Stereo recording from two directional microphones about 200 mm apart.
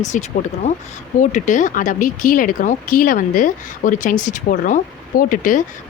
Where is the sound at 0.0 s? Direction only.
35° left (ahead or behind).